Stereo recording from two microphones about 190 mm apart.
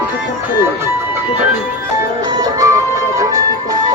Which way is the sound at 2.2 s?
20° right (ahead or behind).